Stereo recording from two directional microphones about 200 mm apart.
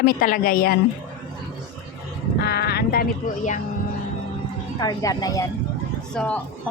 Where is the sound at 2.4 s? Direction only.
50° left (ahead or behind).